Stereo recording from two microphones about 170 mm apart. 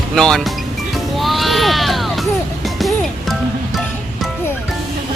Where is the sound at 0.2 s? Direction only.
5° left (ahead or behind).